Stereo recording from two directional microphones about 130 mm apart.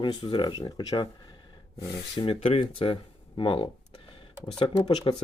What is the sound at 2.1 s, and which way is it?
Speech, 45° left (ahead or behind).